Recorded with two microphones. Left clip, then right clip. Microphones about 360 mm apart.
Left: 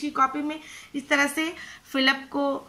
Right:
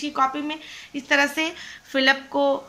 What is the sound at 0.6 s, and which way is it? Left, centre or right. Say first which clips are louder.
Speech: right 3 dB; right.